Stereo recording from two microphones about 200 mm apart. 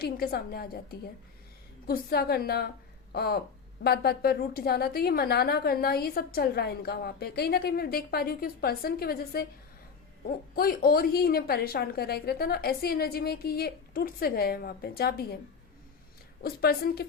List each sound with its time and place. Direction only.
0.0 s a woman's voice: 50° left (ahead or behind)
10.5 s a woman's voice: 50° left (ahead or behind)
16.4 s a woman's voice: 50° left (ahead or behind)